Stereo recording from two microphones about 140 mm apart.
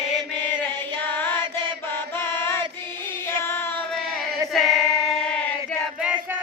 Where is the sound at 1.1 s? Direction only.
10° left (ahead or behind).